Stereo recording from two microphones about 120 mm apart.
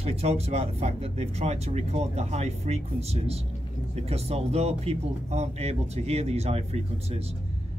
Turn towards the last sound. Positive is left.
turn(degrees=-60)  # may be behind; listen again after turning